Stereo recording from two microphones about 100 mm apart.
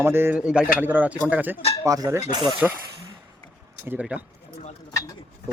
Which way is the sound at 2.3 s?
45° right (ahead or behind).